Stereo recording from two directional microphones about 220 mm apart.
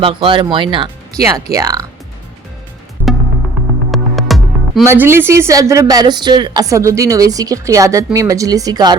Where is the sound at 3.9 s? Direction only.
Centre (ahead or behind).